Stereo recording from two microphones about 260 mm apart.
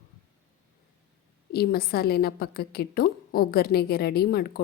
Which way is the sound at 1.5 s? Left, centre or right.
Left.